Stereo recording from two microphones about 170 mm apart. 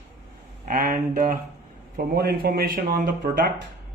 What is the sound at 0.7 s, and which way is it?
Speech, 55° right (ahead or behind).